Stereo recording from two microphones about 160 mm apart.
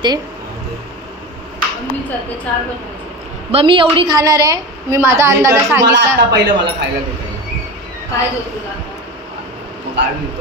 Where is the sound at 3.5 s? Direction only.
35° right (ahead or behind); by 5.8 s 15° right (ahead or behind).